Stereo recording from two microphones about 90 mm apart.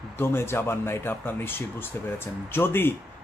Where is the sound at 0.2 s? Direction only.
25° left (ahead or behind).